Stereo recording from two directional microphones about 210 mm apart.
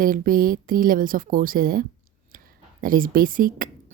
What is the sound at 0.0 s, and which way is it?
Speech, 40° right (ahead or behind).